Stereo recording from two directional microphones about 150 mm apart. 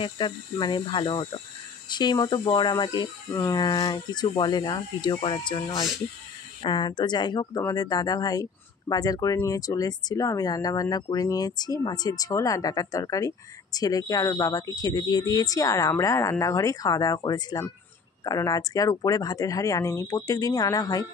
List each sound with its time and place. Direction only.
0.0 s speech: 30° left (ahead or behind)